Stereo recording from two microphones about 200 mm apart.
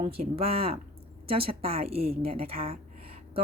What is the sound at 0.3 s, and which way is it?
A woman's voice, 30° right (ahead or behind).